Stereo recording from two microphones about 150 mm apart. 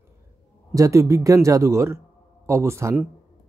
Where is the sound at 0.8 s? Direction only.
20° right (ahead or behind).